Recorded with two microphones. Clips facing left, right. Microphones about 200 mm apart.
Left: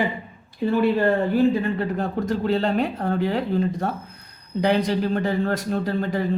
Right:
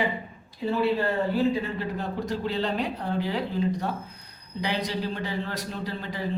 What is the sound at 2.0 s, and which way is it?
A man's voice, 50° left (ahead or behind).